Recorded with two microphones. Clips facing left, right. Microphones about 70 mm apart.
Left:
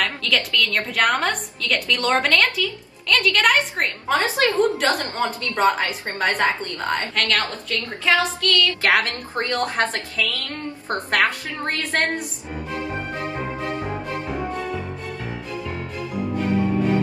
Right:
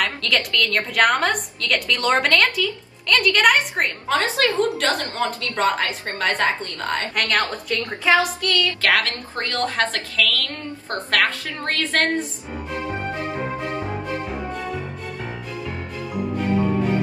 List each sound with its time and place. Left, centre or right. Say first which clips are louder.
0.0 s a woman's voice: even; centre
4.4 s a woman's voice: left 1 dB; left
7.2 s a woman's voice: right 1 dB; centre
8.8 s a woman's voice: left 1 dB; left